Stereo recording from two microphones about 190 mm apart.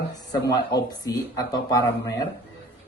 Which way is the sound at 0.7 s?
20° left (ahead or behind).